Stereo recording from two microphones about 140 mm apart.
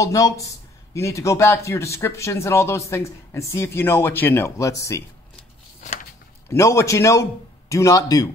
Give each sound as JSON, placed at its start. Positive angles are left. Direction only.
{"t": 0.0, "sound": "speech", "side_deg": 25}
{"t": 6.5, "sound": "speech", "side_deg": 20}